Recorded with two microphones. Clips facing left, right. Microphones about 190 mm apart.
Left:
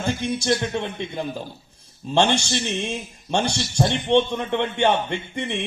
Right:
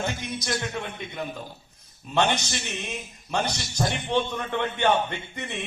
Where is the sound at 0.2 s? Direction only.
30° left (ahead or behind).